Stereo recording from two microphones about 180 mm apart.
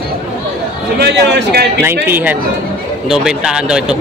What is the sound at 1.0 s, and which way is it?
Speech, 65° right (ahead or behind).